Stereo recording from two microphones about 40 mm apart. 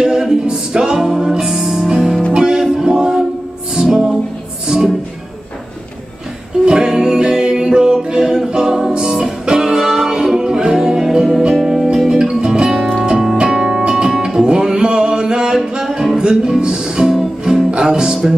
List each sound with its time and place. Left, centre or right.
0.0 s music: centre
2.3 s music: centre
2.8 s a capella: centre
3.7 s music: centre
6.6 s music: centre
6.9 s a capella: centre
9.0 s music: centre
17.6 s music: right